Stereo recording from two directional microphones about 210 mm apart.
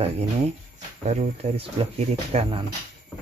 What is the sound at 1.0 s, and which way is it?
Speech, 30° right (ahead or behind).